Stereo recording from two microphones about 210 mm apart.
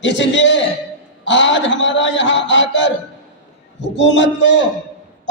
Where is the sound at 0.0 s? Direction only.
60° left (ahead or behind).